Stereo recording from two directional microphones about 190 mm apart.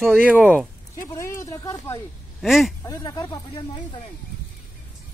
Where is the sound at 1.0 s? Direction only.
15° left (ahead or behind).